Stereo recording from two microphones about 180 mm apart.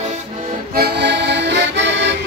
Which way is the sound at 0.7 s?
65° right (ahead or behind).